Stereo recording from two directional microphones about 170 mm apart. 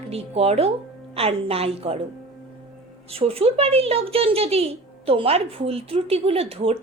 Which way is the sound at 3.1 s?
35° right (ahead or behind).